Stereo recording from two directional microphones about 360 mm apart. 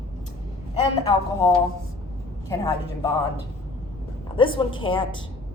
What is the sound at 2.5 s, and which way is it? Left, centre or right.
Speech, centre.